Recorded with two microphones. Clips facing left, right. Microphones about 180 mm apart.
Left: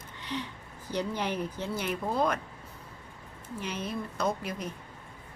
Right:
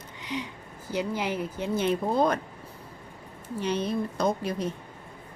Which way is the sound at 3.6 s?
30° right (ahead or behind).